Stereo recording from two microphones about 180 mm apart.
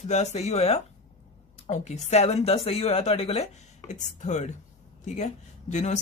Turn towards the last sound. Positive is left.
turn(degrees=40)  # may be behind; listen again after turning